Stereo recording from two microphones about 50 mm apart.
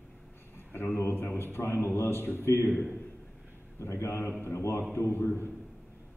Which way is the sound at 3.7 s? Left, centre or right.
Left.